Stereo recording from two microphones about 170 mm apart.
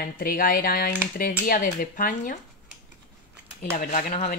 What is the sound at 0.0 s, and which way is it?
Speech, 55° left (ahead or behind).